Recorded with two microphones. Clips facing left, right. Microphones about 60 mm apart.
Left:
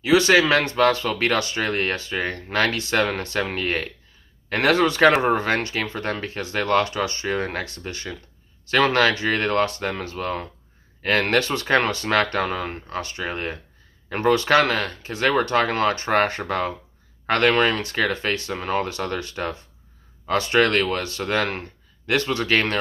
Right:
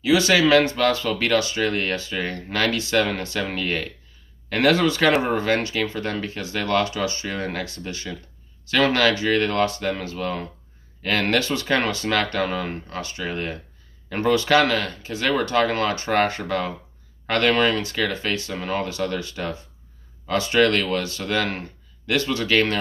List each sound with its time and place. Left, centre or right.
0.0 s speech: left
7.2 s speech: left
8.6 s speech: left
14.2 s speech: left
18.5 s speech: left